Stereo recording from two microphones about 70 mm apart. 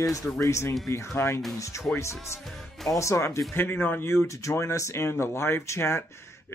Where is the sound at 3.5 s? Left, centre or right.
Left.